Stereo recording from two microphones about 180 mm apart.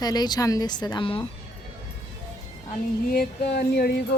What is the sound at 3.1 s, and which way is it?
Speech, 60° left (ahead or behind).